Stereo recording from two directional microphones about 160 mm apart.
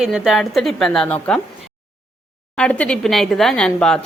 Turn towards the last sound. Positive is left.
turn(degrees=5)  # may be behind; listen again after turning